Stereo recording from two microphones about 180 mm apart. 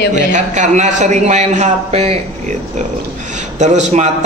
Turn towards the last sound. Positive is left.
turn(degrees=-40)  # may be behind; listen again after turning